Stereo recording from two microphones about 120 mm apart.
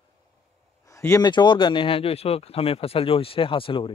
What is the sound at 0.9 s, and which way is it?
Speech, 25° left (ahead or behind).